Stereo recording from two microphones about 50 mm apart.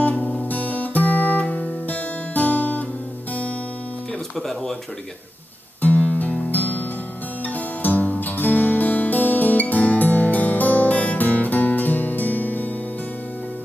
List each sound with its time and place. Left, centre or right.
0.1 s music: left
4.4 s speech: centre
5.8 s guitar: left
6.5 s music: left